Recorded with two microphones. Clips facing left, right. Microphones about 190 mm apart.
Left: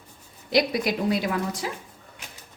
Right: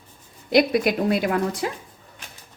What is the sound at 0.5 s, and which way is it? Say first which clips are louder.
A woman's voice: right 4 dB; 55° right (ahead or behind).